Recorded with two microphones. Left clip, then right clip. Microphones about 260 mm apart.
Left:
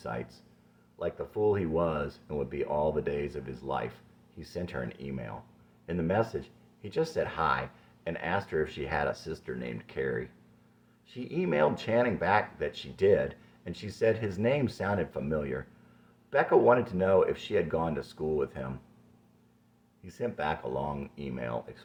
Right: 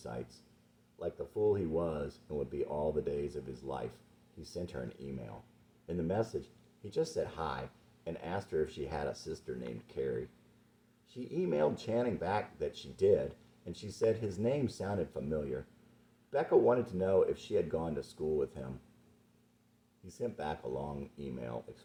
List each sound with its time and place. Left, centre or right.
0.9 s speech: left
6.4 s a sound: left
7.2 s speech: left
20.1 s speech: left